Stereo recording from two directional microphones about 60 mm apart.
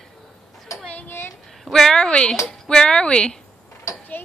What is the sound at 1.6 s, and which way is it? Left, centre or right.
Speech, centre.